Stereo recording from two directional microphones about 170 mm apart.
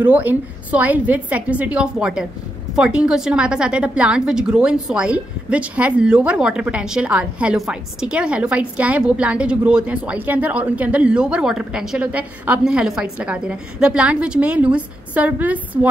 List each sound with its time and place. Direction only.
0.0 s a woman's voice: 10° right (ahead or behind)